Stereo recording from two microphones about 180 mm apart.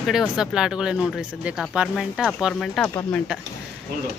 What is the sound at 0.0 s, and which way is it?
Speech, centre (ahead or behind).